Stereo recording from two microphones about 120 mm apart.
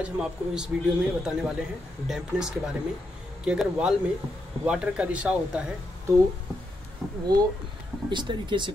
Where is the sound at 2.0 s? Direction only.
5° right (ahead or behind).